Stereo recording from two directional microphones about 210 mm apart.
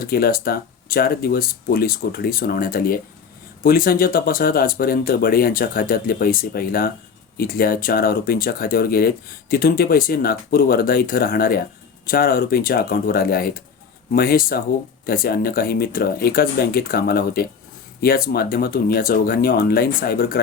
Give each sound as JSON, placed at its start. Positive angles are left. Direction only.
{"t": 0.0, "sound": "speech", "side_deg": 45}